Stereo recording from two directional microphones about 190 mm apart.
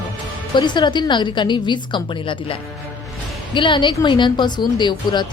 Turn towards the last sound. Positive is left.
turn(degrees=25)  # may be behind; listen again after turning